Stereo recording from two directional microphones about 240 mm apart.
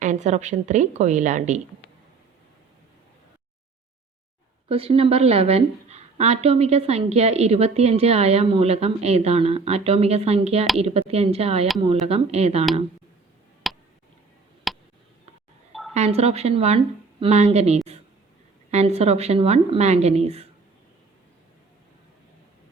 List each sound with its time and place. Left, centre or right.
0.0 s a woman's voice: right
4.7 s a woman's voice: right
13.6 s a sound: centre
16.0 s a woman's voice: right